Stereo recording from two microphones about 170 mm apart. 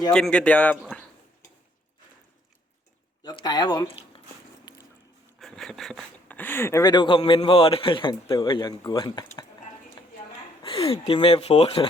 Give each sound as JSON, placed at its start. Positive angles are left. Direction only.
{"t": 0.1, "sound": "speech", "side_deg": 5}
{"t": 3.2, "sound": "speech", "side_deg": 25}
{"t": 4.7, "sound": "a sound", "side_deg": 25}
{"t": 5.4, "sound": "speech", "side_deg": 0}
{"t": 10.6, "sound": "speech", "side_deg": 35}